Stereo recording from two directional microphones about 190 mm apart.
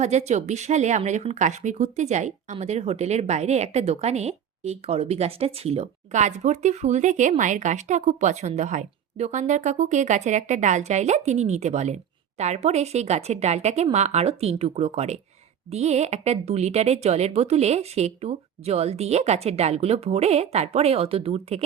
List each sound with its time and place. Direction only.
0.0 s speech: 35° right (ahead or behind)